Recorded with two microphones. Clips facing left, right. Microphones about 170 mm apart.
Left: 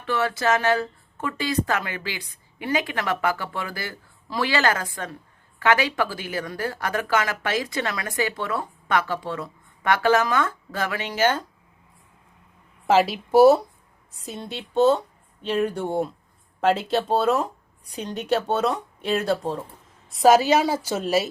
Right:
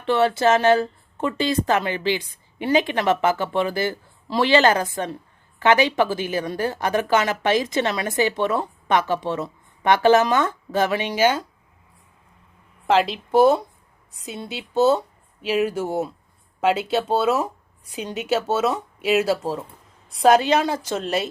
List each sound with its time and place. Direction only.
0.0 s speech: 25° right (ahead or behind)
12.9 s speech: 5° left (ahead or behind)